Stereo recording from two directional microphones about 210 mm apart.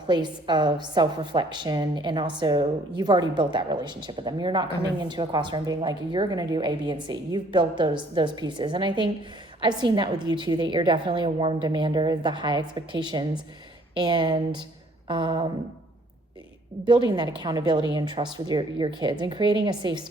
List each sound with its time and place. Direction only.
0.1 s a woman's voice: 20° right (ahead or behind)
15.0 s a sound: 25° right (ahead or behind)
16.8 s a woman's voice: 20° right (ahead or behind)